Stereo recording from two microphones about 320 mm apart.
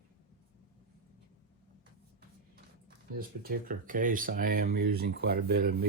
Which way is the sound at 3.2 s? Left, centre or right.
Right.